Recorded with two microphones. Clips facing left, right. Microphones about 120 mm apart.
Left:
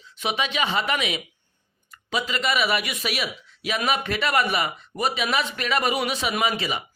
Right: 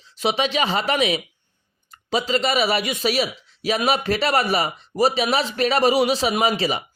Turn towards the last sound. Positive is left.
turn(degrees=-35)  # may be behind; listen again after turning